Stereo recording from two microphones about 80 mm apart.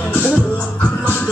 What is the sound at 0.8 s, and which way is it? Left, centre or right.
Music, centre.